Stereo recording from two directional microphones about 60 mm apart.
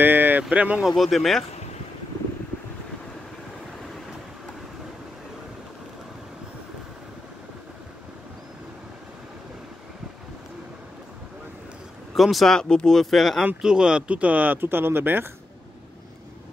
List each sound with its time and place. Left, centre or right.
0.0 s a sound: right
0.5 s speech: centre
0.8 s speech: centre
12.2 s speech: centre
12.5 s speech: centre
13.6 s speech: centre; by 15.2 s right